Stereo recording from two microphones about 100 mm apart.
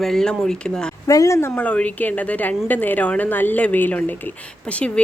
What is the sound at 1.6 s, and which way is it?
A woman's voice, 15° left (ahead or behind).